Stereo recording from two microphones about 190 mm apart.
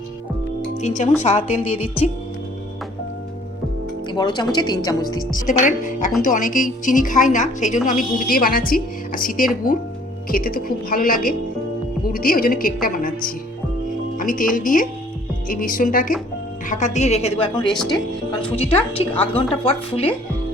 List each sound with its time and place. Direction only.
0.8 s a woman's voice: 40° left (ahead or behind)
4.1 s a woman's voice: 25° left (ahead or behind)
5.5 s a woman's voice: 40° left (ahead or behind)
17.7 s speech: centre (ahead or behind)
18.5 s a woman's voice: 30° left (ahead or behind)